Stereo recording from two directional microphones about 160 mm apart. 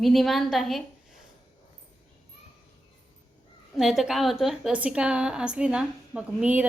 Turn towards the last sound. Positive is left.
turn(degrees=-5)  # may be behind; listen again after turning